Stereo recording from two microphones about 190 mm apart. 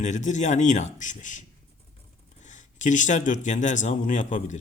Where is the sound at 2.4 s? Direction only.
40° left (ahead or behind).